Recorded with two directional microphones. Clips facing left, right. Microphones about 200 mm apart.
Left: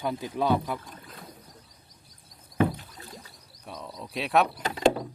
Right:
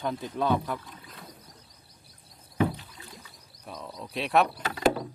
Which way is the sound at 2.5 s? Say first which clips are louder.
Left 2 dB; 50° left (ahead or behind).